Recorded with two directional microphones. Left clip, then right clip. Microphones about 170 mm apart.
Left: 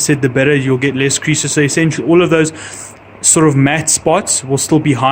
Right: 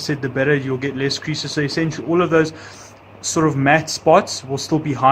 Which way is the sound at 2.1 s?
40° left (ahead or behind).